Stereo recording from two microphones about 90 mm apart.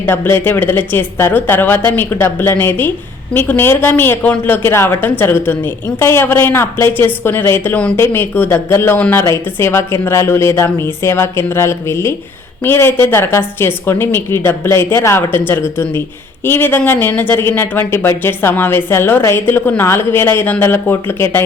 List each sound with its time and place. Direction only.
0.0 s speech: 25° left (ahead or behind)